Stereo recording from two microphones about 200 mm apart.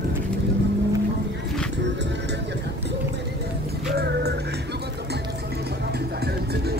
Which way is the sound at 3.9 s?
55° right (ahead or behind).